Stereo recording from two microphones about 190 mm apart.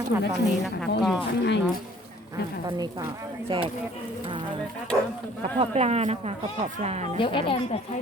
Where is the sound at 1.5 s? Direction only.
65° left (ahead or behind).